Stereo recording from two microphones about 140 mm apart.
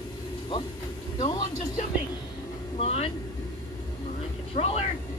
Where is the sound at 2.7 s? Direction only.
45° left (ahead or behind).